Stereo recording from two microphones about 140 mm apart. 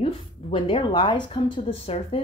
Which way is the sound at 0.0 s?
40° left (ahead or behind).